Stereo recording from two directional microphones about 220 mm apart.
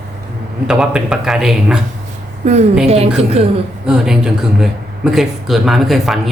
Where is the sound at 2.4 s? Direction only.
30° right (ahead or behind).